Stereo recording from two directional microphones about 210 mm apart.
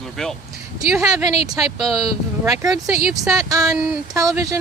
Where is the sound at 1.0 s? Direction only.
15° right (ahead or behind).